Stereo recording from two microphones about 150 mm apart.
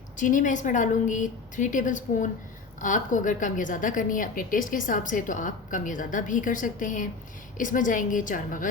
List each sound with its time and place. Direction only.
0.2 s a woman's voice: 60° left (ahead or behind)